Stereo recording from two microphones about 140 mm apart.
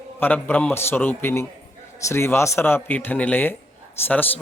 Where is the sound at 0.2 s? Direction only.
15° left (ahead or behind).